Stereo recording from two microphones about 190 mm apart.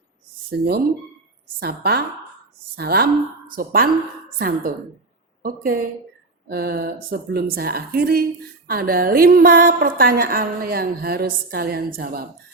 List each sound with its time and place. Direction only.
0.5 s a woman's voice: 55° right (ahead or behind)